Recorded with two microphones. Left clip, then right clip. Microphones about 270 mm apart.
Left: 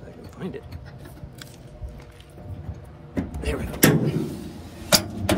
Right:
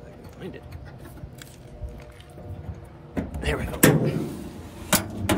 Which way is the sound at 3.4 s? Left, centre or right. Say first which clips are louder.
Even; right.